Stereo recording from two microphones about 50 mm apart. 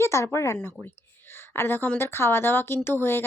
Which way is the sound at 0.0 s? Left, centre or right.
Left.